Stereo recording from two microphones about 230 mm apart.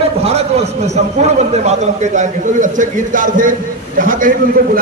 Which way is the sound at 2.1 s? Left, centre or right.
Right.